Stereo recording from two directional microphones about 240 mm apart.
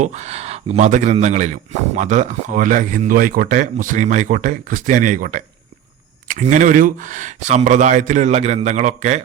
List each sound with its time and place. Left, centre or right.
0.0 s speech: right